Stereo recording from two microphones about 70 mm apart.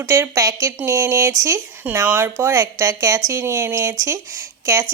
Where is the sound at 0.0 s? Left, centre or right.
Right.